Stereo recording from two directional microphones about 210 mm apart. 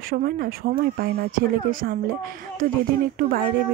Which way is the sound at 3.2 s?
45° right (ahead or behind).